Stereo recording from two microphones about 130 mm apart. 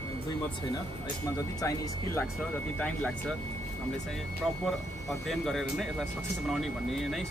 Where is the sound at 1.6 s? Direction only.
20° left (ahead or behind).